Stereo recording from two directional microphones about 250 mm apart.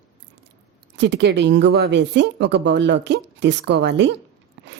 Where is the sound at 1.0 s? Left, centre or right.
Right.